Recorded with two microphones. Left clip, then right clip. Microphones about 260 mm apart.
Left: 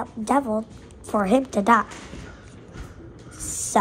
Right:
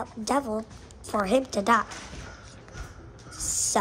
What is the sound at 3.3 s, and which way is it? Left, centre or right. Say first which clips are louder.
Owl: right 3 dB; centre.